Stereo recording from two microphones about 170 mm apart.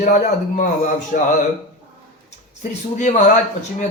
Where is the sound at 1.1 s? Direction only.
60° left (ahead or behind).